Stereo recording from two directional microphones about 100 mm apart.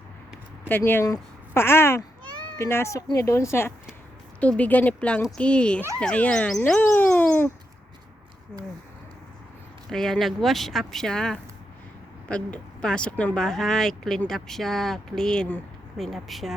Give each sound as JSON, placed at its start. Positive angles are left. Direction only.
{"t": 1.0, "sound": "speech", "side_deg": 30}
{"t": 4.4, "sound": "speech", "side_deg": 15}
{"t": 9.9, "sound": "speech", "side_deg": 5}